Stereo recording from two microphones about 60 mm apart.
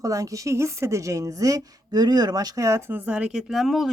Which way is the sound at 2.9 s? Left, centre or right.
Right.